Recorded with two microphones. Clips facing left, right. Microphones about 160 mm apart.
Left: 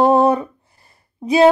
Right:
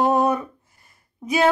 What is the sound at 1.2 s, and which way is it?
Speech, 30° left (ahead or behind).